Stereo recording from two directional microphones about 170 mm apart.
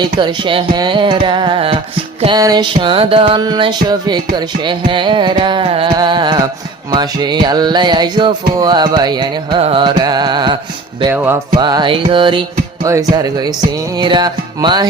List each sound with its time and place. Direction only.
0.0 s music: 30° right (ahead or behind)
11.1 s music: 15° right (ahead or behind)
11.5 s music: 25° right (ahead or behind)